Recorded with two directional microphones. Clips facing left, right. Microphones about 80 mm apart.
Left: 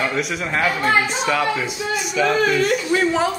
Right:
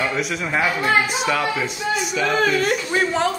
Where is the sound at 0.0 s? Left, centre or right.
Centre.